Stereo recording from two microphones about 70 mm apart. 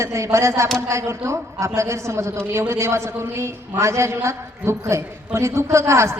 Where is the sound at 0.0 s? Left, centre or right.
Right.